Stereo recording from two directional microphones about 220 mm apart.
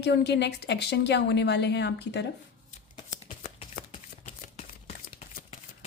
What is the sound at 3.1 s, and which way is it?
Shuffling cards, 35° left (ahead or behind).